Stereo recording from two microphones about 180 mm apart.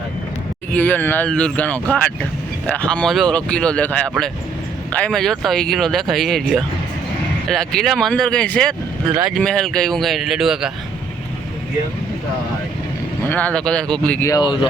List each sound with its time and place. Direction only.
0.7 s speech: 10° left (ahead or behind)
7.5 s speech: 5° left (ahead or behind)
9.4 s speech: 5° left (ahead or behind)
13.2 s speech: 10° left (ahead or behind)
14.3 s speech: 25° left (ahead or behind)